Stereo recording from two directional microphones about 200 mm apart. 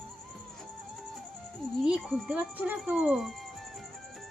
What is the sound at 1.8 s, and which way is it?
Speech, 5° right (ahead or behind).